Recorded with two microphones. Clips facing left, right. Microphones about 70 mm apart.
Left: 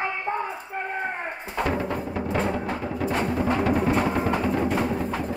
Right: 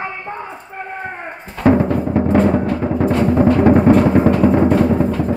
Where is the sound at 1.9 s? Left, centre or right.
Right.